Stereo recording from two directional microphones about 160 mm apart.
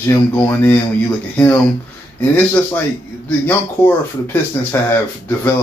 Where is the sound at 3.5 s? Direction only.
15° left (ahead or behind).